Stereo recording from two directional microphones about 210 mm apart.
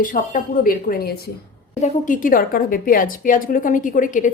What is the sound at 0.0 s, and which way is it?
A woman's voice, 40° left (ahead or behind).